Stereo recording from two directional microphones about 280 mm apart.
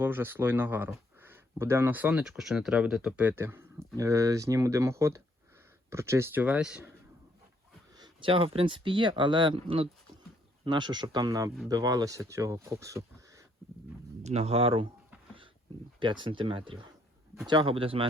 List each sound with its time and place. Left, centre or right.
0.0 s speech: centre
7.9 s speech: centre
14.3 s speech: right
16.0 s speech: centre